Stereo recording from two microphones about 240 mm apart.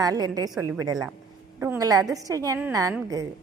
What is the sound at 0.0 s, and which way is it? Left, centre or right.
A woman's voice, centre.